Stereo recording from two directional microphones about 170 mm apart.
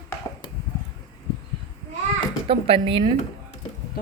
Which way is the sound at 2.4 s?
35° right (ahead or behind).